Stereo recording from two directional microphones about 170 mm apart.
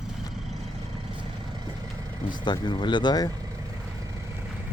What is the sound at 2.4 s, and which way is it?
Speech, 25° left (ahead or behind).